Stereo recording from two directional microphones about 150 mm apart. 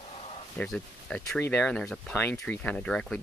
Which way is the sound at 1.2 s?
15° left (ahead or behind).